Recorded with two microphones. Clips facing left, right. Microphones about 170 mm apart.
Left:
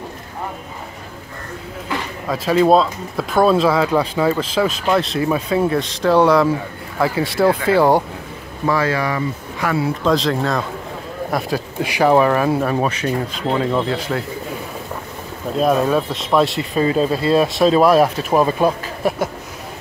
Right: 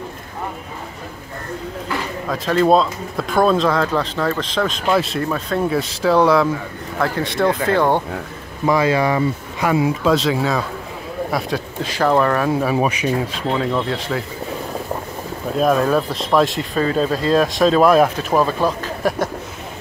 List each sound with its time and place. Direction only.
2.2 s speech: 5° left (ahead or behind)
8.6 s speech: 15° right (ahead or behind)
10.0 s speech: 5° right (ahead or behind)
11.8 s speech: 10° left (ahead or behind)
12.7 s speech: 10° right (ahead or behind)
13.3 s speech: 5° left (ahead or behind)
15.5 s speech: centre (ahead or behind)